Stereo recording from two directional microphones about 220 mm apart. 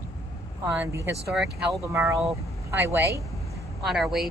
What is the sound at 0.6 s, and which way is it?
A woman's voice, 15° right (ahead or behind).